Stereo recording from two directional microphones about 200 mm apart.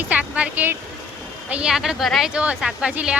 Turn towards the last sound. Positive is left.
turn(degrees=-5)  # may be behind; listen again after turning